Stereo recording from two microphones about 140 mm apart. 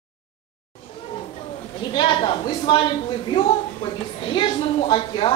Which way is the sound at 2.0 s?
35° left (ahead or behind).